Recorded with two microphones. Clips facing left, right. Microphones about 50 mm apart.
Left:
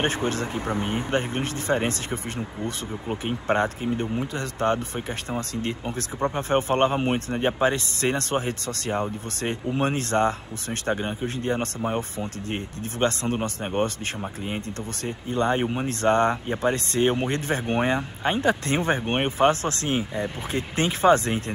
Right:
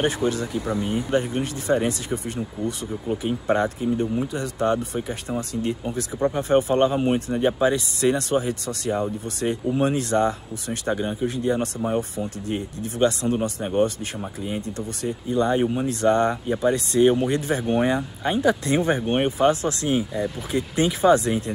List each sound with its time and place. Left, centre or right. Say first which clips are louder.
0.0 s speech: right 2 dB; left
15.6 s speech: right 3 dB; left
15.9 s speech: left 1 dB; left